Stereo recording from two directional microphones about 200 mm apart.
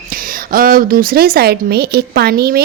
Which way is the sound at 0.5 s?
45° right (ahead or behind).